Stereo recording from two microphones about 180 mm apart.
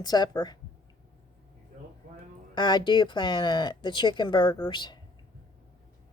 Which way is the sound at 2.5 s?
25° left (ahead or behind).